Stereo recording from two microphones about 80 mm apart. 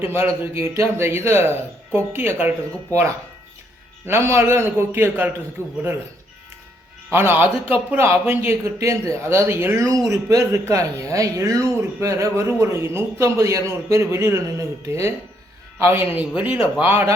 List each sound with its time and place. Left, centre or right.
0.0 s a man's voice: right
4.0 s speech: right
7.1 s a man's voice: right
8.6 s a man's voice: right; by 16.9 s centre
16.9 s a man's voice: right